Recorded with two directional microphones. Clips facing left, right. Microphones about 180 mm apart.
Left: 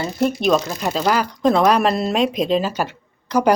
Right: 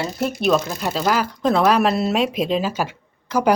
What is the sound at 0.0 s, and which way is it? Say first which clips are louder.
A woman's voice: left 2 dB; centre (ahead or behind).